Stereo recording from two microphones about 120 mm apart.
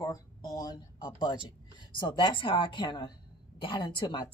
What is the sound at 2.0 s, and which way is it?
A woman's voice, 40° left (ahead or behind).